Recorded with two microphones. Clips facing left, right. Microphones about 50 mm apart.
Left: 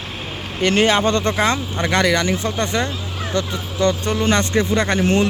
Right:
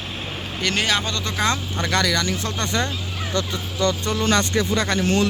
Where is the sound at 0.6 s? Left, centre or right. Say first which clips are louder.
Left 7 dB; left.